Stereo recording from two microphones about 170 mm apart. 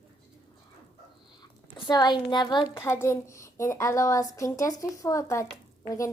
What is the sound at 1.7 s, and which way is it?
Speech, 25° left (ahead or behind).